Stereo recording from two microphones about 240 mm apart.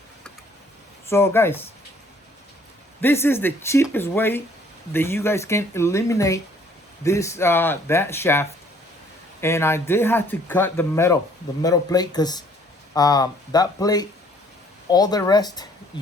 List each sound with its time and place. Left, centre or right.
1.0 s speech: centre
3.0 s speech: centre